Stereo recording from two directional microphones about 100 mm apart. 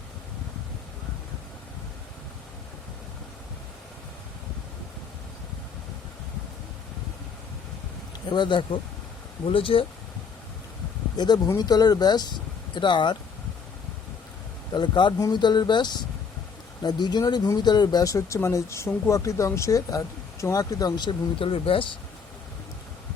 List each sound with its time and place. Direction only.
8.3 s speech: 50° left (ahead or behind)
11.4 s speech: 40° left (ahead or behind)
14.7 s speech: 50° left (ahead or behind); by 21.8 s 65° left (ahead or behind)